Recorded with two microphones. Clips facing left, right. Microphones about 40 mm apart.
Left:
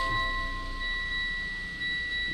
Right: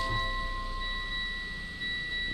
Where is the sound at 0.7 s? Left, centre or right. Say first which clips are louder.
Left 3 dB; centre.